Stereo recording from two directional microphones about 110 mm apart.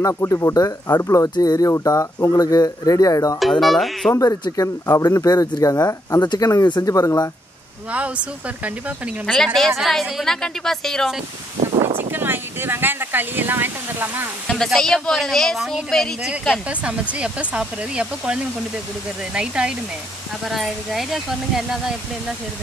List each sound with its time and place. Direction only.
0.0 s speech: 25° left (ahead or behind)
1.3 s speech: 40° left (ahead or behind)
3.3 s a woman's voice: centre (ahead or behind)
4.1 s speech: 30° left (ahead or behind)
9.2 s a woman's voice: 5° left (ahead or behind)
12.0 s speech: 20° right (ahead or behind)
14.5 s a woman's voice: 5° left (ahead or behind)
16.6 s a woman's voice: 10° right (ahead or behind)